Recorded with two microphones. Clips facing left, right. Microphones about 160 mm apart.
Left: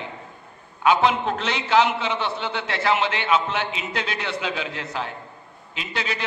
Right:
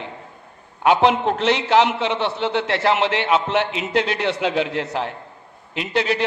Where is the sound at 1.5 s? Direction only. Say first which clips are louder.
Right 2 dB; 75° right (ahead or behind).